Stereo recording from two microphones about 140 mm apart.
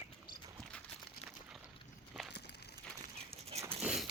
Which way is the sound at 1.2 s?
45° left (ahead or behind).